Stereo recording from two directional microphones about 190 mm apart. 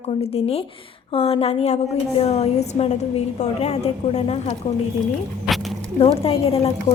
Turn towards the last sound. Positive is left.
turn(degrees=30)  # may be behind; listen again after turning